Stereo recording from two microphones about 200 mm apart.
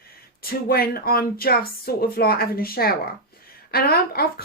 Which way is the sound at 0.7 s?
50° left (ahead or behind).